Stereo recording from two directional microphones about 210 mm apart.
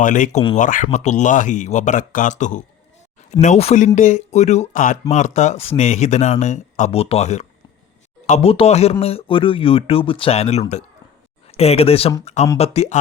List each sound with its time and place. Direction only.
0.0 s speech: 35° left (ahead or behind)